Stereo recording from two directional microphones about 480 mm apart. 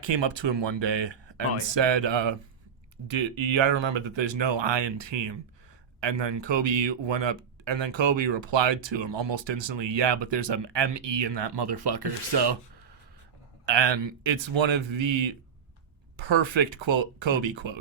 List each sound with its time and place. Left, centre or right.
0.0 s speech: right
13.7 s a man's voice: right